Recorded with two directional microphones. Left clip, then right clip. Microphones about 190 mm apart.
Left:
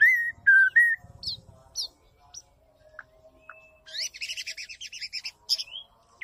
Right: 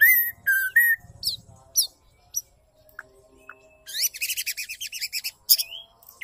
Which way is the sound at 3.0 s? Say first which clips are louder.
Right 4 dB; 55° right (ahead or behind).